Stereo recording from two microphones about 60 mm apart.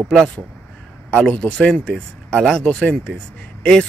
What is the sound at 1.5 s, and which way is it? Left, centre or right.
Speech, centre.